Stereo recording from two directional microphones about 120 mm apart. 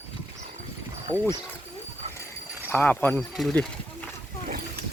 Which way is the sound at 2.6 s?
15° left (ahead or behind).